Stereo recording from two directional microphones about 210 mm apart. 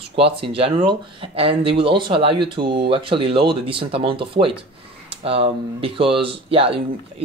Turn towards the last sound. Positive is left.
turn(degrees=-25)  # may be behind; listen again after turning